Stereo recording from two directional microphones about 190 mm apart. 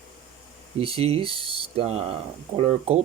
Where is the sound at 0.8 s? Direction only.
30° right (ahead or behind).